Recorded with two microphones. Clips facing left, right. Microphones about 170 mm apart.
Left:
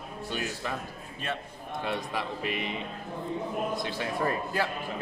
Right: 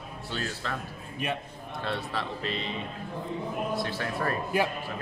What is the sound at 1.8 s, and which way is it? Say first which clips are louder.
Speech: even; 15° left (ahead or behind).